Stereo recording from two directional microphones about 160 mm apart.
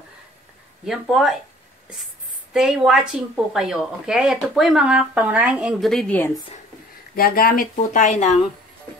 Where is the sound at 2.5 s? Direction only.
5° right (ahead or behind).